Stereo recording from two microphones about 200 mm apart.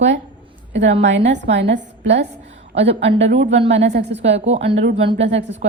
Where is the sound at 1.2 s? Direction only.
60° right (ahead or behind).